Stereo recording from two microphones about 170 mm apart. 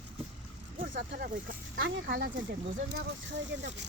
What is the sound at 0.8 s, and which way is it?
Speech, 80° right.